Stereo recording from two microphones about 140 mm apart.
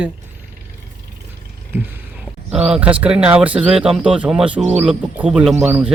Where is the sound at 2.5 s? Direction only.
5° right (ahead or behind).